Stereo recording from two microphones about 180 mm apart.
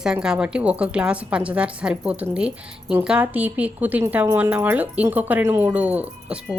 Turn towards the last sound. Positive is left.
turn(degrees=-5)  # may be behind; listen again after turning